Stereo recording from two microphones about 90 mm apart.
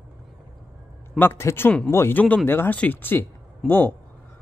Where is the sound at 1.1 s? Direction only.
25° left (ahead or behind).